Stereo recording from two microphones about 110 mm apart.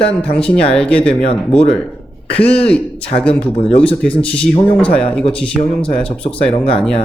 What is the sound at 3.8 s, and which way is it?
Speech, 10° left (ahead or behind).